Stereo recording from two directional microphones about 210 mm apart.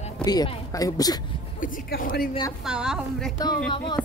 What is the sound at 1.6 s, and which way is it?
Speech, 40° left (ahead or behind).